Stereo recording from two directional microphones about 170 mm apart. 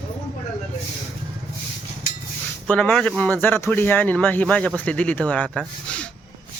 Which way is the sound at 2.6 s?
5° left (ahead or behind).